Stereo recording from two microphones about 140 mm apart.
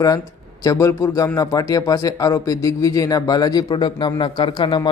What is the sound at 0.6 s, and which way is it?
A man's voice, 20° left (ahead or behind).